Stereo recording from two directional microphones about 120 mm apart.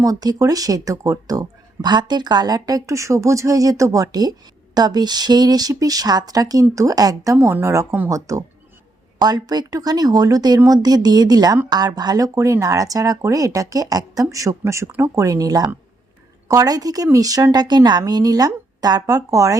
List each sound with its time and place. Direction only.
0.0 s speech: 30° right (ahead or behind)